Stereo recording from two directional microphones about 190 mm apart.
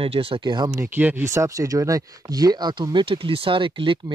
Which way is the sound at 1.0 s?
10° right (ahead or behind).